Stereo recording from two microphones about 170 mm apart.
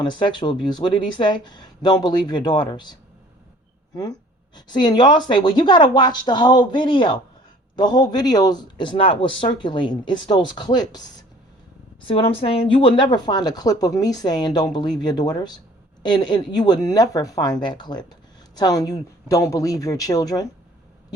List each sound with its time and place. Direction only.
0.0 s speech: 25° left (ahead or behind)